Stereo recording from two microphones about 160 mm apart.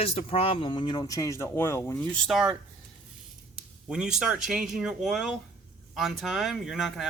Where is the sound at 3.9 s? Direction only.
5° right (ahead or behind).